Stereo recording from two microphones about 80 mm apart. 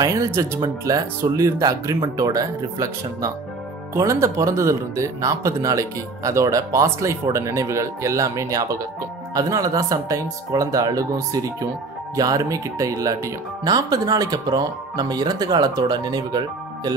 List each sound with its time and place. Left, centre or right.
0.0 s speech: right